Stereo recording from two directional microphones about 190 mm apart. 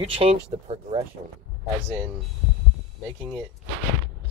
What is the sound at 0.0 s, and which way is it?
Speech, 30° right (ahead or behind).